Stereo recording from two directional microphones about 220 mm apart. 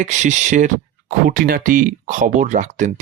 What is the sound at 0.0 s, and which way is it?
Speech, 35° right (ahead or behind).